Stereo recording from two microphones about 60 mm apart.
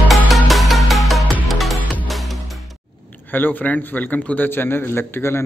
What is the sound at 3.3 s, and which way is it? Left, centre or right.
A man's voice, left.